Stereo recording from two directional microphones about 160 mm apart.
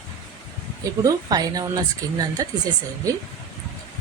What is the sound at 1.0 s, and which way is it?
A woman's voice, 25° right (ahead or behind).